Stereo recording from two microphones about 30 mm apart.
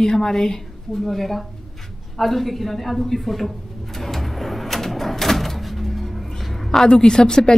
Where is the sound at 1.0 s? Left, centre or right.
Centre.